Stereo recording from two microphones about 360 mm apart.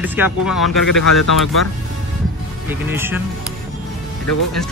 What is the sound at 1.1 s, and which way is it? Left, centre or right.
Speech, left.